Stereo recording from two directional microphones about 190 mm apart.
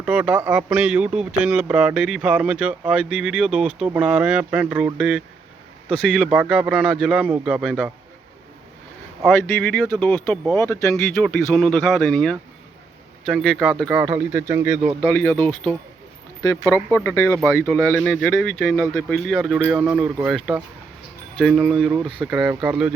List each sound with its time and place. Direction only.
0.0 s speech: 10° right (ahead or behind)
9.2 s speech: 5° left (ahead or behind)
11.1 s speech: 5° left (ahead or behind)
15.1 s speech: 5° left (ahead or behind)